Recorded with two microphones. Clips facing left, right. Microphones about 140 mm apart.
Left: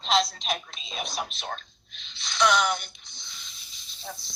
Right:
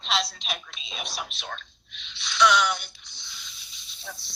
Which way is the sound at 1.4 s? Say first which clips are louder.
Left 2 dB; 40° left (ahead or behind).